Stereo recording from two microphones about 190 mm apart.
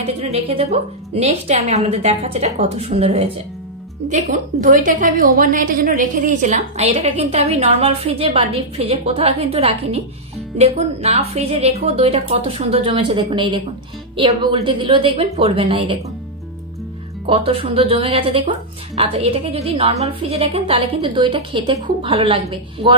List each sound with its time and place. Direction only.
0.0 s a woman's voice: 30° right (ahead or behind)
17.3 s a woman's voice: 30° right (ahead or behind)